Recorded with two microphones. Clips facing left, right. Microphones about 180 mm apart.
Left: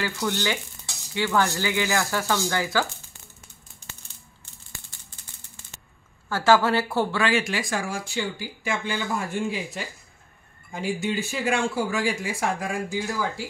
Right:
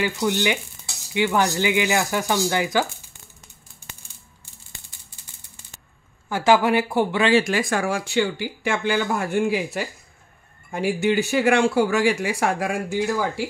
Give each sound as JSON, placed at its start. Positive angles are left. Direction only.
{"t": 0.0, "sound": "speech", "side_deg": -15}
{"t": 4.9, "sound": "rattle", "side_deg": -15}
{"t": 6.2, "sound": "speech", "side_deg": -15}
{"t": 7.4, "sound": "speech", "side_deg": -55}